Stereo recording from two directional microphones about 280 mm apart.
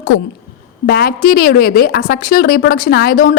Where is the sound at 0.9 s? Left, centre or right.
Left.